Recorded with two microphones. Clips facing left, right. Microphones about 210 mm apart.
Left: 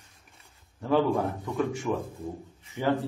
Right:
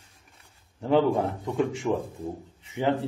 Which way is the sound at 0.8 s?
20° right (ahead or behind).